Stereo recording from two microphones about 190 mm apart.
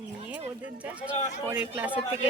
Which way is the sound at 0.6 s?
5° right (ahead or behind).